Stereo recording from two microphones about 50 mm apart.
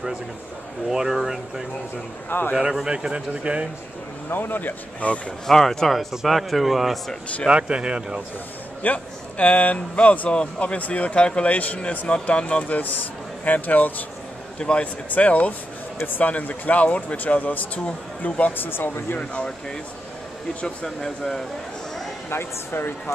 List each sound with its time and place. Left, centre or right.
0.8 s speech: centre
2.2 s speech: left
2.5 s speech: centre
4.3 s speech: left
5.5 s a man's voice: centre
7.4 s speech: centre
8.8 s speech: left
14.6 s speech: left
18.6 s speech: left
19.1 s speech: centre
22.3 s speech: left